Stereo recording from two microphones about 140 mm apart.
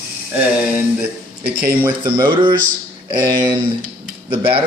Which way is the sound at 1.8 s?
30° right (ahead or behind).